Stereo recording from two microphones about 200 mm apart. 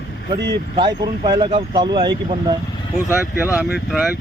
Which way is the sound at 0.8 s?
25° right (ahead or behind).